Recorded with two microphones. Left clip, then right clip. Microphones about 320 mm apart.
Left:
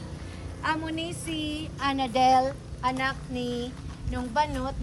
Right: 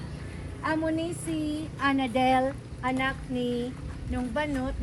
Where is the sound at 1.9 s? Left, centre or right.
Centre.